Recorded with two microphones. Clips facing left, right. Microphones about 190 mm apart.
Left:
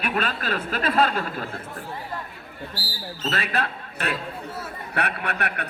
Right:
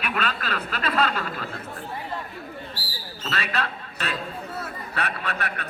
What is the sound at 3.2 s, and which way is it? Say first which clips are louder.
Speech: left 2 dB; 50° left (ahead or behind).